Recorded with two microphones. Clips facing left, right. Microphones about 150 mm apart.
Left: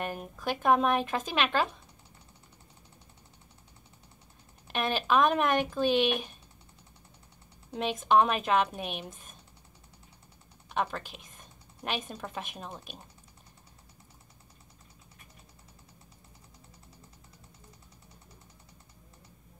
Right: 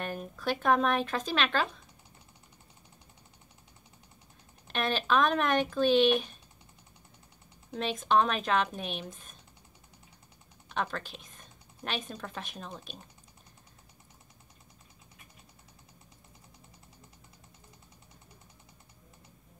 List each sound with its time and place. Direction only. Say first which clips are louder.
0.0 s speech: even; 10° left (ahead or behind)
4.6 s speech: left 1 dB; 10° left (ahead or behind)
8.1 s speech: left 2 dB; 10° left (ahead or behind)
10.7 s speech: left 2 dB; 10° left (ahead or behind)